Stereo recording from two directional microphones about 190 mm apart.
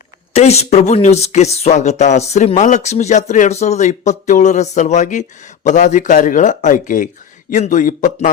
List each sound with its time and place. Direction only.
0.3 s a man's voice: 35° left (ahead or behind)